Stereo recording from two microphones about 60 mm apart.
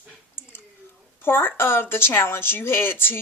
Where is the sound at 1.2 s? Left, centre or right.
Left.